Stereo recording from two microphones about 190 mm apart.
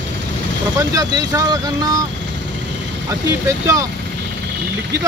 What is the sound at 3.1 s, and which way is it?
Speech, 15° right (ahead or behind).